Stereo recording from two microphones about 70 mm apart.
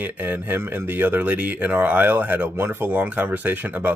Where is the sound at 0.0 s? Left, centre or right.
Right.